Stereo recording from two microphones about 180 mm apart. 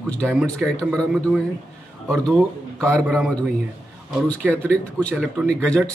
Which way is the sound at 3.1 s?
5° left (ahead or behind).